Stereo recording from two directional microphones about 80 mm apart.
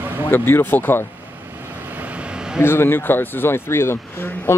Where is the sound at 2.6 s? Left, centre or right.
Left.